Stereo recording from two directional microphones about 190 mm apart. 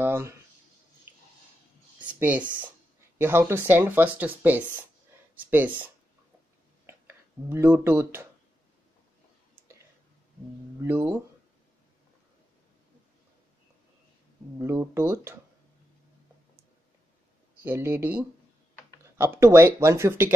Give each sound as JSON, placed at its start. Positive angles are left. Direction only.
{"t": 0.0, "sound": "speech", "side_deg": -15}
{"t": 2.0, "sound": "speech", "side_deg": -10}
{"t": 7.4, "sound": "speech", "side_deg": -10}
{"t": 10.8, "sound": "speech", "side_deg": -10}
{"t": 14.6, "sound": "speech", "side_deg": -15}
{"t": 17.6, "sound": "speech", "side_deg": -10}